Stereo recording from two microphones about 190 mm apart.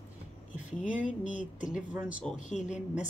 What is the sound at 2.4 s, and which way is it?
Speech, 40° left (ahead or behind).